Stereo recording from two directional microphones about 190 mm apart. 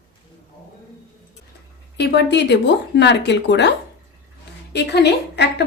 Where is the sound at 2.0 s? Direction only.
65° left (ahead or behind).